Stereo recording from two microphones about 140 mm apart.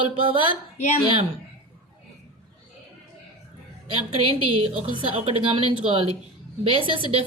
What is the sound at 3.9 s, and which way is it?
A woman's voice, 40° right (ahead or behind).